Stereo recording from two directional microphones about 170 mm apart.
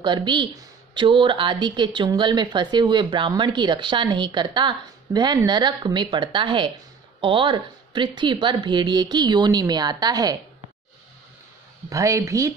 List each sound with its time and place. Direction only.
0.0 s speech: 25° right (ahead or behind)
11.9 s speech: 20° right (ahead or behind)